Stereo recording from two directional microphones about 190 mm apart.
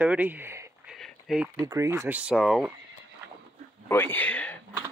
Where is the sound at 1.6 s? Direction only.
15° right (ahead or behind).